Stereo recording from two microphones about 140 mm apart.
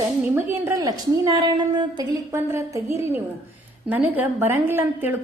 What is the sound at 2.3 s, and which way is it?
A woman's voice, 20° right (ahead or behind).